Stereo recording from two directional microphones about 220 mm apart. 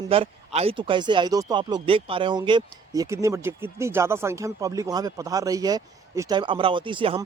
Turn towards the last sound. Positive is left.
turn(degrees=-25)  # may be behind; listen again after turning